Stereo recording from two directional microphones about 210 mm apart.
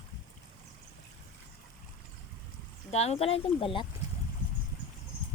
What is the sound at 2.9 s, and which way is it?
Speech, 30° left (ahead or behind).